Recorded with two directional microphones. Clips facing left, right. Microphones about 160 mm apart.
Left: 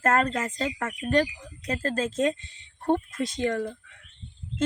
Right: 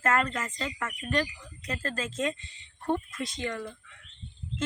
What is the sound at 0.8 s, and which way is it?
Speech, 45° left (ahead or behind).